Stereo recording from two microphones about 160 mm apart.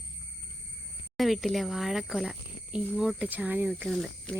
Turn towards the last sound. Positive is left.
turn(degrees=0)  # may be behind; listen again after turning